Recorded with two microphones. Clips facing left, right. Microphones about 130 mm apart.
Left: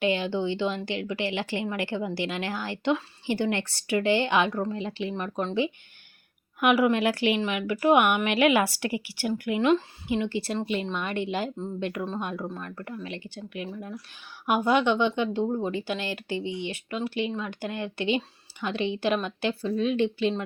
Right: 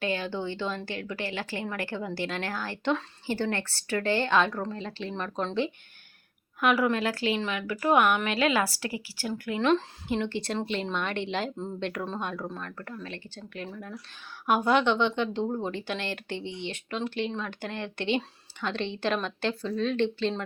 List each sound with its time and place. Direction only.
0.0 s a woman's voice: 15° left (ahead or behind)